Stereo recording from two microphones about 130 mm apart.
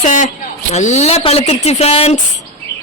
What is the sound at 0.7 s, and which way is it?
Speech, 60° left (ahead or behind).